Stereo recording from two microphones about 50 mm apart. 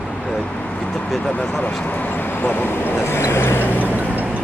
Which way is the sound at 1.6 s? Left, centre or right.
Left.